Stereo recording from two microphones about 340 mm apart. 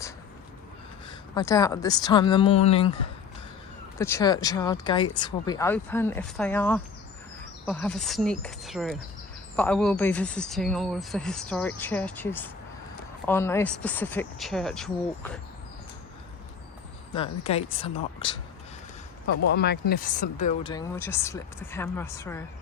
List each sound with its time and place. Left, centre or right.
1.4 s speech: centre
3.9 s speech: centre
17.2 s speech: centre
19.5 s speech: left
20.7 s speech: centre